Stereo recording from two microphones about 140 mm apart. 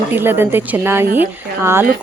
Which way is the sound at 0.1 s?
15° right (ahead or behind).